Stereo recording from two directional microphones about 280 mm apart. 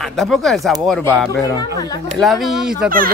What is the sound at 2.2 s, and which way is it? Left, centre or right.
Speech, centre.